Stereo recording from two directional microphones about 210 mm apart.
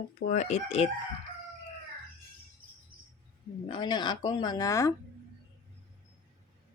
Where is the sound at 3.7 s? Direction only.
20° left (ahead or behind).